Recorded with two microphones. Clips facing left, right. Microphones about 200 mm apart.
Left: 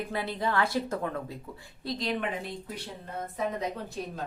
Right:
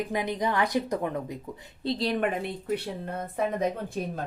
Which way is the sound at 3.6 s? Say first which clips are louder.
Right 5 dB; 50° right (ahead or behind).